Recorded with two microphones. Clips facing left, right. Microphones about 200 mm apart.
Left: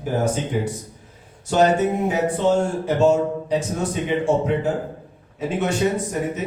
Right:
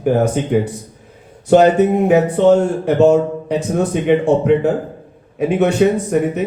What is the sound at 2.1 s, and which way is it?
Speech, 60° right (ahead or behind).